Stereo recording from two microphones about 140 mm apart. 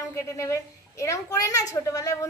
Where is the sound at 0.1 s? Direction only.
20° left (ahead or behind).